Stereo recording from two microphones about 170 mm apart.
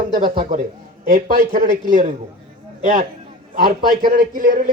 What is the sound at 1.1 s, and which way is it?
A man's voice, 45° right (ahead or behind).